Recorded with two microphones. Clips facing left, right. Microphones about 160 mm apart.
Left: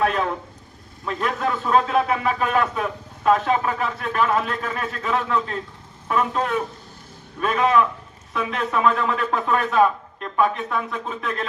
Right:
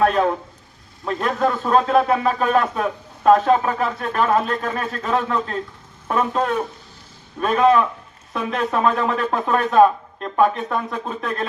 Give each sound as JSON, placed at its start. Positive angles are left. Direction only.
{"t": 0.0, "sound": "speech", "side_deg": -45}